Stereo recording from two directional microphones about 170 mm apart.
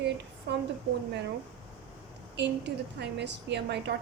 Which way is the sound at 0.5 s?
75° right (ahead or behind).